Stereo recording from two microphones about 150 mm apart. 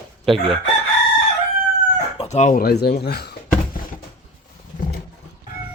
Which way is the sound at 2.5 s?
90° left.